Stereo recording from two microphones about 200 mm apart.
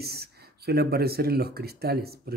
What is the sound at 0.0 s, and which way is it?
Speech, 50° right (ahead or behind).